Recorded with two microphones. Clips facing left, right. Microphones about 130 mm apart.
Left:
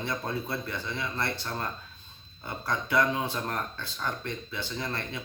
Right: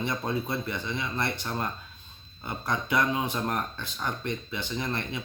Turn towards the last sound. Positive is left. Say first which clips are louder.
# right 3 dB
turn(degrees=-15)  # may be behind; listen again after turning